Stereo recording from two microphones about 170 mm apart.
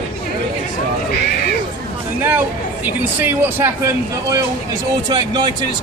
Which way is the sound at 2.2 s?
10° right (ahead or behind).